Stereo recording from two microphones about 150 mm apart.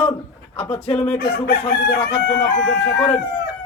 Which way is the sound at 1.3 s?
90° left.